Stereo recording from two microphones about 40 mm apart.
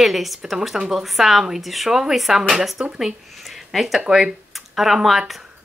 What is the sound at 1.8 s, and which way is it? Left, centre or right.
Speech, centre.